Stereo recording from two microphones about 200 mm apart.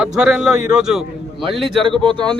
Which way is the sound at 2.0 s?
25° right (ahead or behind).